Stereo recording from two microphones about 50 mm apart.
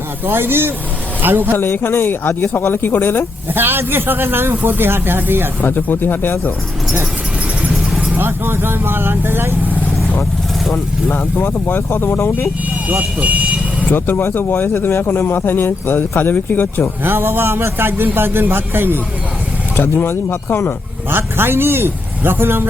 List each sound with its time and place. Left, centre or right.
0.3 s a man's voice: right
1.5 s speech: left
3.5 s a man's voice: right
5.6 s speech: left
8.2 s a man's voice: right
11.2 s speech: left
13.0 s speech: right
13.9 s speech: left
17.0 s a man's voice: right
19.7 s speech: left
21.1 s a man's voice: right